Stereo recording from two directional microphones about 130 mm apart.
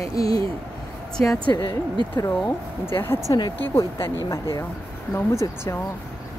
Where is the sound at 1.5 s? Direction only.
25° left (ahead or behind).